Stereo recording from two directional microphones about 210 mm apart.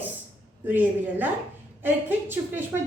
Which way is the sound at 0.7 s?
10° right (ahead or behind).